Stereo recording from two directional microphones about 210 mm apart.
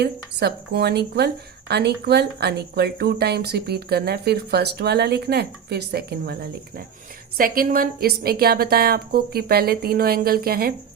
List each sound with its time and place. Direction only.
0.0 s speech: 50° right (ahead or behind)
7.3 s speech: 40° right (ahead or behind)